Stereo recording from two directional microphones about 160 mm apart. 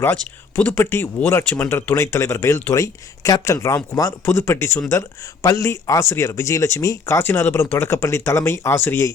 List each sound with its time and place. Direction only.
0.0 s speech: 10° left (ahead or behind)